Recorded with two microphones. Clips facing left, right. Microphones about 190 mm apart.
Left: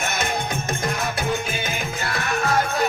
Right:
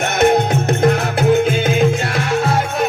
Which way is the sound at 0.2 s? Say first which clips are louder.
Right 12 dB; 65° right (ahead or behind).